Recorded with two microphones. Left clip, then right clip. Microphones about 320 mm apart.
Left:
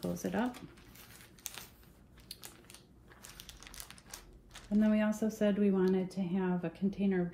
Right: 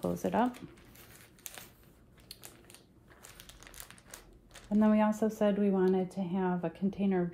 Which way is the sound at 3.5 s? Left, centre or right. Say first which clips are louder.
Left 1 dB; centre.